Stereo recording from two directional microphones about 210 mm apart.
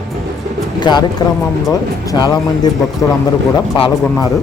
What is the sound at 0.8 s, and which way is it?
Speech, 20° left (ahead or behind).